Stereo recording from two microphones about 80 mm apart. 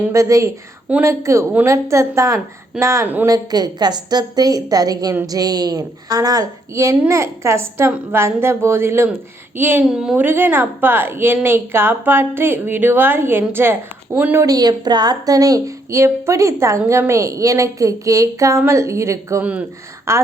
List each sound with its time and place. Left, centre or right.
0.1 s speech: right
3.2 s a woman's voice: right
9.8 s speech: centre
10.2 s a woman's voice: right
14.4 s speech: right
19.4 s a woman's voice: centre
20.1 s speech: right